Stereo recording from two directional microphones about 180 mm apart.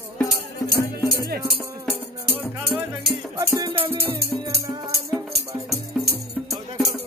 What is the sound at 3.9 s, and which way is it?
Music, 15° right (ahead or behind).